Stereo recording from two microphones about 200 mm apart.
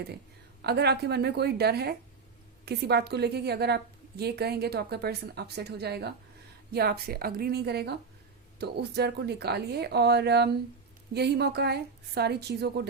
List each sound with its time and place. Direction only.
0.6 s a woman's voice: 55° right (ahead or behind)